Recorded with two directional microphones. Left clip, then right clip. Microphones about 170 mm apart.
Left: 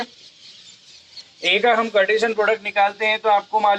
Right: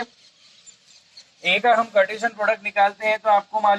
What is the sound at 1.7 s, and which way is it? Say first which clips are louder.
Speech: left 1 dB; 20° left (ahead or behind).